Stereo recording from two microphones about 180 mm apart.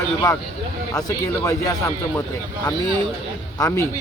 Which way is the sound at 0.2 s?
20° left (ahead or behind).